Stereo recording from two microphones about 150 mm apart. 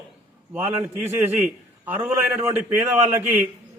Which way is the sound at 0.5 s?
15° right (ahead or behind).